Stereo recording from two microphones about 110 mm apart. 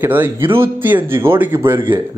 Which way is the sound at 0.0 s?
20° right (ahead or behind).